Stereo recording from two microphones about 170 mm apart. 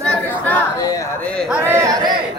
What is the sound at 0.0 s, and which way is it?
Chatter, 10° left (ahead or behind).